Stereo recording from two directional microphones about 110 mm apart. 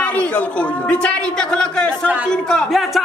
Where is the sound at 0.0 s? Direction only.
10° left (ahead or behind).